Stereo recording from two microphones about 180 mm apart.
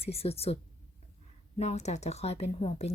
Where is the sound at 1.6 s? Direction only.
40° left (ahead or behind).